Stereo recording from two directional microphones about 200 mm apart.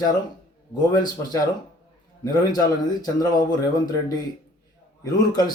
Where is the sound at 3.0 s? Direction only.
20° left (ahead or behind).